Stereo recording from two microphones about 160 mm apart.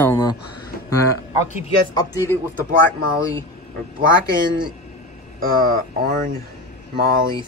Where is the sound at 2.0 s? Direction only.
20° left (ahead or behind).